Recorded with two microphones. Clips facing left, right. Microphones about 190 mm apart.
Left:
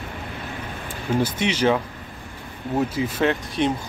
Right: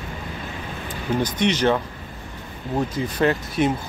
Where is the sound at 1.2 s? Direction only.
5° left (ahead or behind).